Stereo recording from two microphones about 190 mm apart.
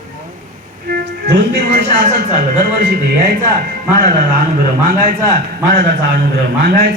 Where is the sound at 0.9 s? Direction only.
55° right (ahead or behind).